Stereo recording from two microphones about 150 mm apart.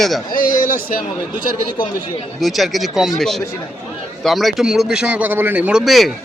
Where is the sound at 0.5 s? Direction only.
65° left (ahead or behind).